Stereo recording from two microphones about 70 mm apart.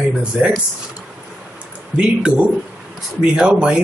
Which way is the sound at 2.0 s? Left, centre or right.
Centre.